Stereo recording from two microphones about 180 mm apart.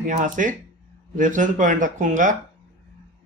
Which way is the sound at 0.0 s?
45° right (ahead or behind).